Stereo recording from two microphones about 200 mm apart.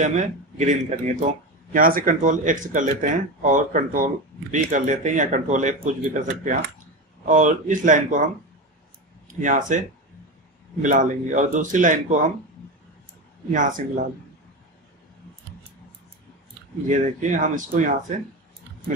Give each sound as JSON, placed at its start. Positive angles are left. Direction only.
{"t": 0.0, "sound": "a man's voice", "side_deg": -40}
{"t": 9.3, "sound": "a man's voice", "side_deg": -40}
{"t": 13.5, "sound": "a man's voice", "side_deg": -40}
{"t": 16.8, "sound": "a man's voice", "side_deg": -40}